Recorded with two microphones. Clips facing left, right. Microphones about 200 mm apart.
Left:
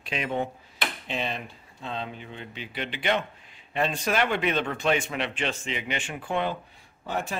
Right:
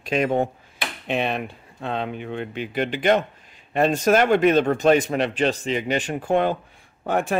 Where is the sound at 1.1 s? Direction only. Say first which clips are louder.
Right 10 dB; 60° right (ahead or behind).